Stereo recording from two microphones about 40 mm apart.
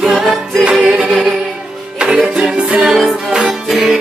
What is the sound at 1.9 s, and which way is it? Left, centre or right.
Music, right.